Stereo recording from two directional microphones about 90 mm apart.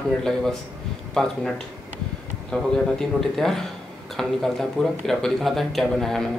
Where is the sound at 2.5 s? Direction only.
5° left (ahead or behind).